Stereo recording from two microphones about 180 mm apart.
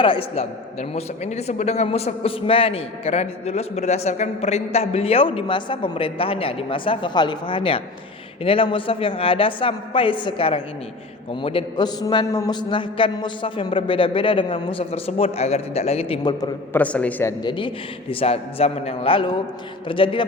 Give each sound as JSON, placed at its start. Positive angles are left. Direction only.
{"t": 0.0, "sound": "a man's voice", "side_deg": 30}
{"t": 16.4, "sound": "a man's voice", "side_deg": 10}
{"t": 17.4, "sound": "a man's voice", "side_deg": 25}